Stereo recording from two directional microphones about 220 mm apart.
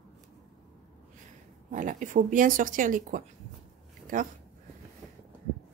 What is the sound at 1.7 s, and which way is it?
Speech, 35° right (ahead or behind).